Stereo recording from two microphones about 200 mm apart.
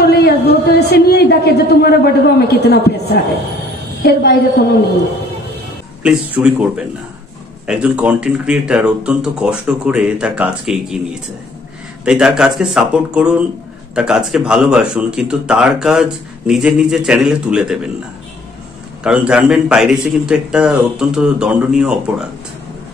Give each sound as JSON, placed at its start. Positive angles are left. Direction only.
{"t": 0.0, "sound": "a woman's voice", "side_deg": 55}
{"t": 6.0, "sound": "speech", "side_deg": -5}
{"t": 12.0, "sound": "speech", "side_deg": -5}
{"t": 19.0, "sound": "speech", "side_deg": -5}